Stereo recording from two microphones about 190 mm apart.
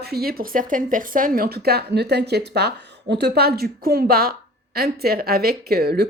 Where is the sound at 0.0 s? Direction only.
55° right (ahead or behind).